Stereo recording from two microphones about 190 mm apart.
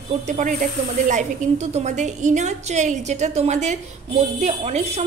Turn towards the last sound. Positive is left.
turn(degrees=-35)  # may be behind; listen again after turning